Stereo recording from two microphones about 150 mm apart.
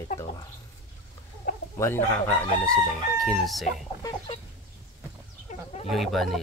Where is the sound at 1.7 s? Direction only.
20° left (ahead or behind).